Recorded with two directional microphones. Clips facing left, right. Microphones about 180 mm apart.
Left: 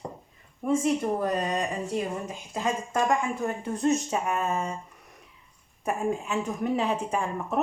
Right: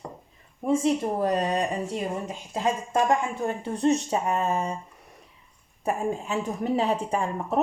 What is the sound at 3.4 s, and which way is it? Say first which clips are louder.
Speech: right 2 dB; 30° right (ahead or behind).